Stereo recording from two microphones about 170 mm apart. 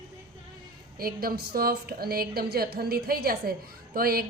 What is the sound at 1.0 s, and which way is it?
A woman's voice, 60° right (ahead or behind).